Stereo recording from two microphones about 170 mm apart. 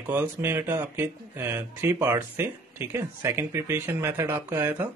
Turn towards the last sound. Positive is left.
turn(degrees=-10)  # may be behind; listen again after turning